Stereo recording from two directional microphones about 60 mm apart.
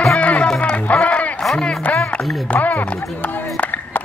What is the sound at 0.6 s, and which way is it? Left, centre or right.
Music, left.